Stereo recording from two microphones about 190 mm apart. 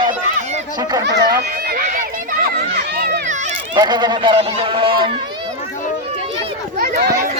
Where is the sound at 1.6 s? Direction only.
55° right (ahead or behind).